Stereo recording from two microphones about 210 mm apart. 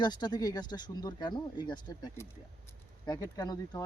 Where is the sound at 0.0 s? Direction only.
20° left (ahead or behind).